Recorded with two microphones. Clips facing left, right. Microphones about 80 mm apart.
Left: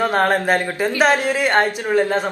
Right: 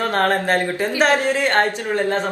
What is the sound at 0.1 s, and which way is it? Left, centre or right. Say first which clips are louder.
A woman's voice: left 1 dB; centre.